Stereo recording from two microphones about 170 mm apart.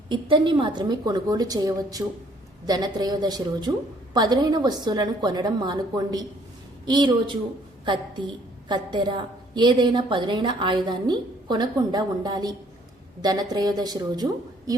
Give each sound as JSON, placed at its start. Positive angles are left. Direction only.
{"t": 0.1, "sound": "a woman's voice", "side_deg": -30}
{"t": 8.7, "sound": "a woman's voice", "side_deg": -25}